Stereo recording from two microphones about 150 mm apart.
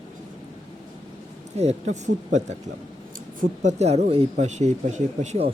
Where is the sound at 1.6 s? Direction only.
50° right (ahead or behind).